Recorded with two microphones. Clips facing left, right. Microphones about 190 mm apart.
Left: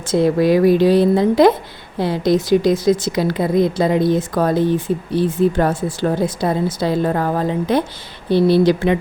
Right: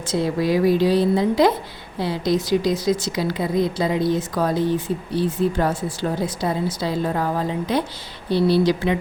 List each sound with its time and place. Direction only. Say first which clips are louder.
0.1 s a woman's voice: left 6 dB; 60° left (ahead or behind)